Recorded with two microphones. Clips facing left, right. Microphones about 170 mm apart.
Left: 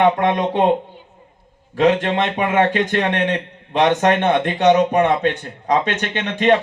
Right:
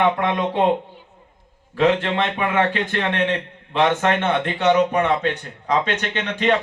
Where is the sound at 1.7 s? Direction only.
20° left (ahead or behind).